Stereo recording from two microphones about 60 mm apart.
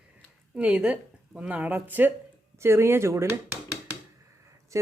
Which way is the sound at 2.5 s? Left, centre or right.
Right.